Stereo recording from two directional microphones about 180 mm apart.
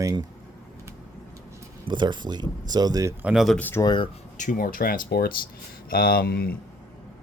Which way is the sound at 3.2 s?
Centre (ahead or behind).